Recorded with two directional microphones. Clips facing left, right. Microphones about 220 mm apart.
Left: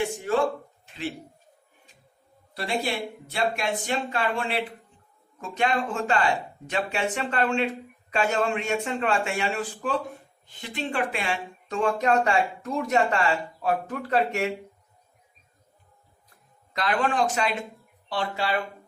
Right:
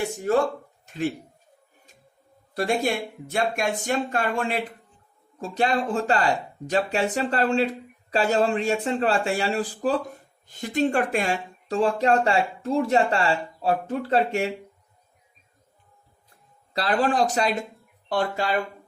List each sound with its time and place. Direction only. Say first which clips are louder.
0.3 s speech: right 4 dB; 40° right (ahead or behind)
2.6 s speech: right 4 dB; 45° right (ahead or behind)
5.4 s speech: right 2 dB; 35° right (ahead or behind)
16.7 s speech: right 3 dB; 35° right (ahead or behind)